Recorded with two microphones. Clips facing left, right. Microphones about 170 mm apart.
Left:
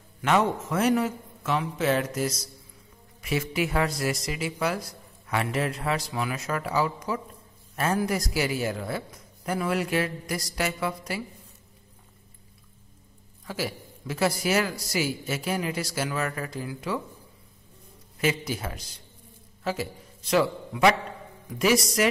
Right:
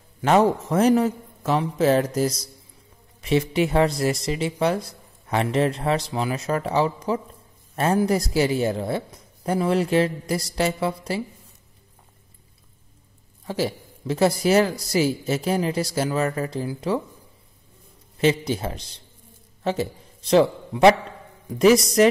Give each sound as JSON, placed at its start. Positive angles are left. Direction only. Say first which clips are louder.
{"t": 0.2, "sound": "a man's voice", "louder": "right 6 dB", "side_deg": -35}
{"t": 13.5, "sound": "a man's voice", "louder": "right 6 dB", "side_deg": -35}
{"t": 18.1, "sound": "a man's voice", "louder": "right 6 dB", "side_deg": -30}